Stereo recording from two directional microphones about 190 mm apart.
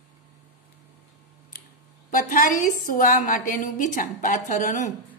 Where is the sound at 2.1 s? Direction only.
45° left (ahead or behind).